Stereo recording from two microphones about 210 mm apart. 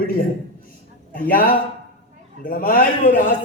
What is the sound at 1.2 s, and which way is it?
A man's voice, 40° left (ahead or behind).